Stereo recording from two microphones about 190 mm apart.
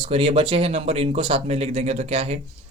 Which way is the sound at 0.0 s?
30° right (ahead or behind).